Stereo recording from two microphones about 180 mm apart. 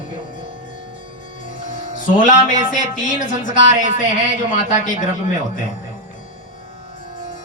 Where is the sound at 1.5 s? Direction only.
45° left (ahead or behind).